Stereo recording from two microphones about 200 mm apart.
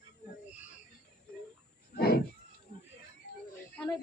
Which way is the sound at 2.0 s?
50° left (ahead or behind).